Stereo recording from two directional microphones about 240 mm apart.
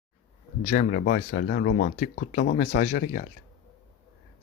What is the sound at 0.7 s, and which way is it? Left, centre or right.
Speech, left.